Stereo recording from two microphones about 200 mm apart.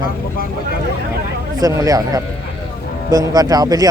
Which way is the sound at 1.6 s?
15° right (ahead or behind).